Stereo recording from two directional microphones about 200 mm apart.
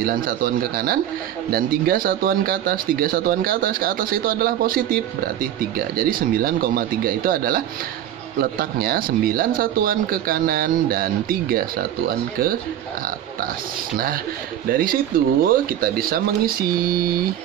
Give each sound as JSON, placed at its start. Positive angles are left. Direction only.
{"t": 0.0, "sound": "speech", "side_deg": -45}
{"t": 13.9, "sound": "speech", "side_deg": -45}